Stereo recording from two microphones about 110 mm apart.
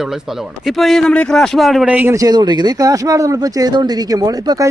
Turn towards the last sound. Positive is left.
turn(degrees=-30)  # may be behind; listen again after turning